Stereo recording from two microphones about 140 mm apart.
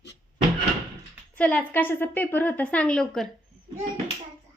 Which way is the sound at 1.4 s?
10° left (ahead or behind).